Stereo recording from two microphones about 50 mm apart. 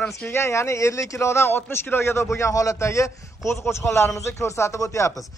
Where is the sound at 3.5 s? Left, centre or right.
Left.